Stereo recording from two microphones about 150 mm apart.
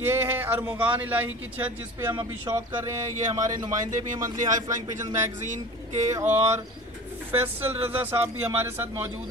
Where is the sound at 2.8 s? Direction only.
20° right (ahead or behind).